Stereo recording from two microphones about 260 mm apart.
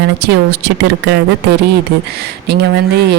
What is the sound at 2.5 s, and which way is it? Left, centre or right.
Speech, right.